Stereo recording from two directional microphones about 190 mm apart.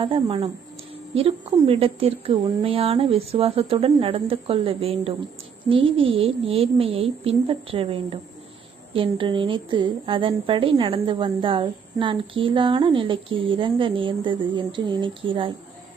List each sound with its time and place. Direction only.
0.0 s a woman's voice: 30° right (ahead or behind)